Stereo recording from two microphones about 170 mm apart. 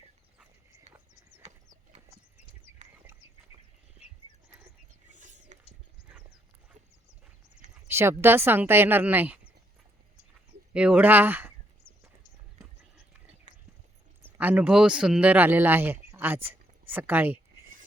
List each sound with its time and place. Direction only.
1.4 s horse: 40° right (ahead or behind)
5.1 s a sound: 45° right (ahead or behind)
7.9 s a sound: 15° right (ahead or behind)
8.2 s a woman's voice: 15° right (ahead or behind)
10.8 s a woman's voice: 5° right (ahead or behind)
14.3 s speech: 10° right (ahead or behind)